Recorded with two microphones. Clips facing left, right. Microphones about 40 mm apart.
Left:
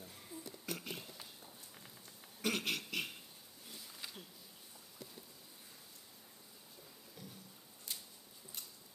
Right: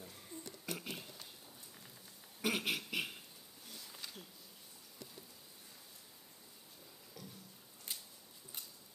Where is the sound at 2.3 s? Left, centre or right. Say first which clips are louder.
Right 1 dB; centre.